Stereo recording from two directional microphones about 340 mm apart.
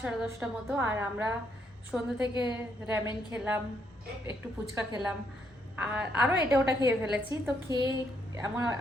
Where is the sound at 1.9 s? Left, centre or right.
Centre.